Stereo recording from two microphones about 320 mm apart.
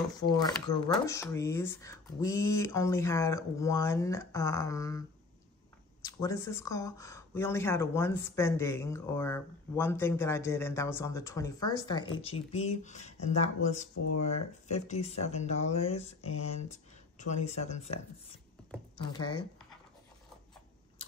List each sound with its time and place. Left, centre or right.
0.3 s speech: centre
6.0 s speech: centre
19.0 s speech: centre